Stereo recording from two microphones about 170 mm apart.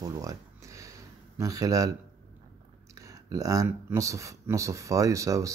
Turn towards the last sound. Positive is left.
turn(degrees=-20)  # may be behind; listen again after turning